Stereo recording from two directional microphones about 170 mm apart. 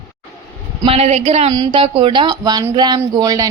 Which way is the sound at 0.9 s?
40° right (ahead or behind).